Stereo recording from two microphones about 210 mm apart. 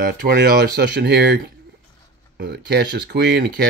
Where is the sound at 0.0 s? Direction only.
50° right (ahead or behind).